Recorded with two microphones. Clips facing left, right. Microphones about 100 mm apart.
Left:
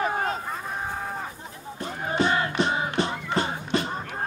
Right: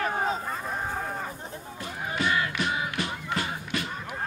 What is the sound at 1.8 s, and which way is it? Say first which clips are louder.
Music: left 5 dB; 30° left (ahead or behind).